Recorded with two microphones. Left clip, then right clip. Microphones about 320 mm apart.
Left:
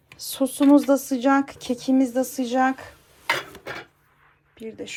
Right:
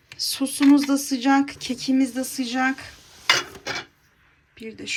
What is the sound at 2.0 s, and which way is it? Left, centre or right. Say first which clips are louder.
Speech: left 3 dB; left.